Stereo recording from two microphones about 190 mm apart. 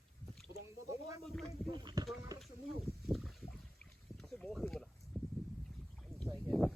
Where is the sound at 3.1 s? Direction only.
Centre (ahead or behind).